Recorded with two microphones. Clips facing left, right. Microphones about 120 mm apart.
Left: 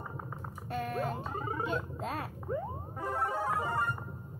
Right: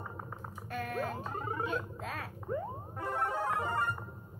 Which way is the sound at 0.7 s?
25° left (ahead or behind).